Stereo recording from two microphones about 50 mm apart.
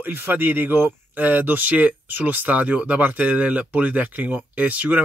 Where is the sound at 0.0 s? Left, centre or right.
Right.